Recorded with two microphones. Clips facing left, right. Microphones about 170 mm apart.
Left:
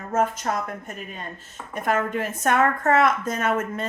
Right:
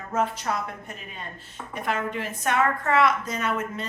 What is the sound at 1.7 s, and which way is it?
A woman's voice, 50° left (ahead or behind).